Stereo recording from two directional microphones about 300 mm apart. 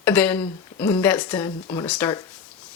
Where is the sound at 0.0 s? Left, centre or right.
Centre.